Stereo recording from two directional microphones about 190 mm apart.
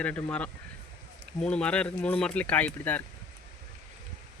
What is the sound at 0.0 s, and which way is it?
Speech, 5° left (ahead or behind).